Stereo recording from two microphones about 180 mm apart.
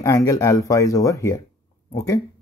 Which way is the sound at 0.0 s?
15° left (ahead or behind).